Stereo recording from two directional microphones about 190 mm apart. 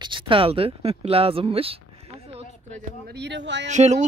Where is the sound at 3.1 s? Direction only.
65° right (ahead or behind).